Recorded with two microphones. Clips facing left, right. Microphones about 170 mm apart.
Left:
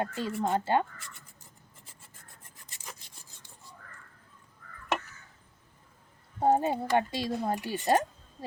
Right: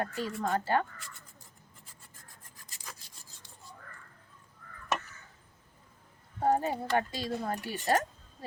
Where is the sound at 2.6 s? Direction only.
20° left (ahead or behind).